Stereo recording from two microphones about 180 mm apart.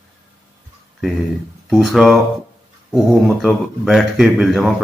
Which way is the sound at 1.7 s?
Centre (ahead or behind).